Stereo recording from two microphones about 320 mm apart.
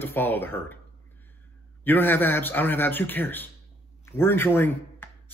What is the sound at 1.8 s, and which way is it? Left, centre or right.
Speech, centre.